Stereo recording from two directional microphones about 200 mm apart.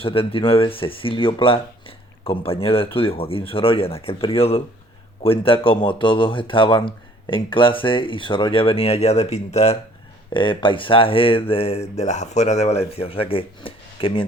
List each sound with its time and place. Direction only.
0.0 s speech: 25° left (ahead or behind)